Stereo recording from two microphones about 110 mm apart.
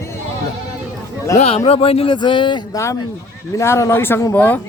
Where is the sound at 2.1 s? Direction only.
45° left (ahead or behind).